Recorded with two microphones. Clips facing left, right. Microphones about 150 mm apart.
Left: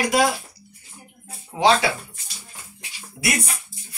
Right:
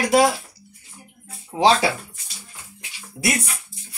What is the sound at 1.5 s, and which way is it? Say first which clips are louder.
Speech: right 1 dB; 35° right (ahead or behind).